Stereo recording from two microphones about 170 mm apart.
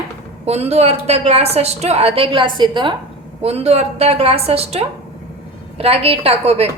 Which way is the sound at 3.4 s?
40° right (ahead or behind).